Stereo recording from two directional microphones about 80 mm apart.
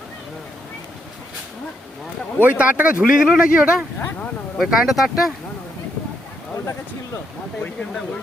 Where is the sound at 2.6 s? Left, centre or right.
Centre.